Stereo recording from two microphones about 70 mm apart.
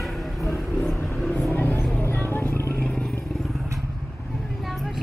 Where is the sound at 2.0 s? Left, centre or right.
Left.